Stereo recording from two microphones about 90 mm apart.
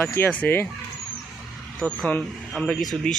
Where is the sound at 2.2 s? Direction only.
5° left (ahead or behind).